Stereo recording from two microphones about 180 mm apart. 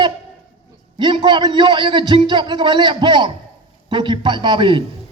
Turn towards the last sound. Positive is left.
turn(degrees=-25)  # may be behind; listen again after turning